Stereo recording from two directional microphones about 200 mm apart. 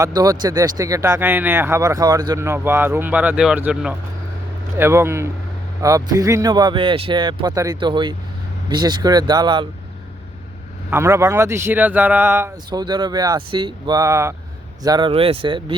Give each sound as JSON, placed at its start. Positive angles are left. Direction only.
{"t": 0.0, "sound": "speech", "side_deg": -20}
{"t": 10.9, "sound": "speech", "side_deg": -15}